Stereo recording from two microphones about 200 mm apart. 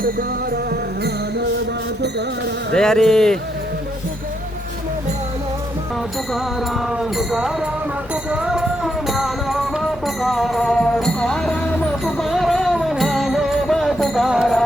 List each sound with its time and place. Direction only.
0.7 s music: 55° right (ahead or behind)
2.7 s music: 5° left (ahead or behind)
6.3 s music: centre (ahead or behind)